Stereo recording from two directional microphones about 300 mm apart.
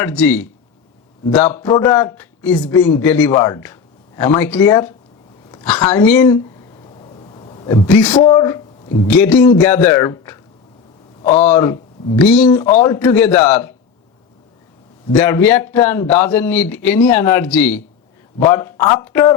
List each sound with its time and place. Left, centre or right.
0.0 s a woman's voice: centre
6.8 s a sound: centre
9.0 s speech: centre
15.2 s speech: centre